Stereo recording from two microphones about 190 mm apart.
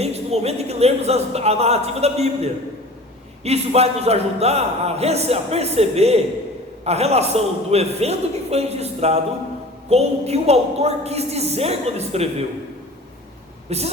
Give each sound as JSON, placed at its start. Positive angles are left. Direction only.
{"t": 0.0, "sound": "a man's voice", "side_deg": -35}
{"t": 13.7, "sound": "a woman's voice", "side_deg": -35}